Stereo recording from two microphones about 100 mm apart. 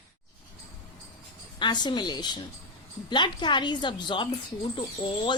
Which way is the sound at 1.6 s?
45° left (ahead or behind).